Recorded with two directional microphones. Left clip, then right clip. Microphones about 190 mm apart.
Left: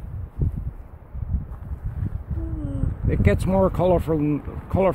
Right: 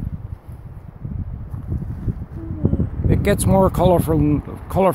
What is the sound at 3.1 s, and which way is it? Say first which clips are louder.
Speech: right 4 dB; 15° right (ahead or behind).